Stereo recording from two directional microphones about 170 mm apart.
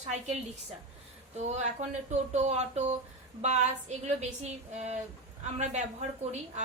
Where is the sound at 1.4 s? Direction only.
45° right (ahead or behind).